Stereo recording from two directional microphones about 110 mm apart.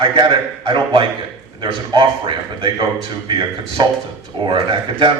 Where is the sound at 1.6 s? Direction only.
50° right (ahead or behind).